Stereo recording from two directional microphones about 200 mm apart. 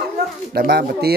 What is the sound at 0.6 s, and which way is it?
Speech, 50° right (ahead or behind).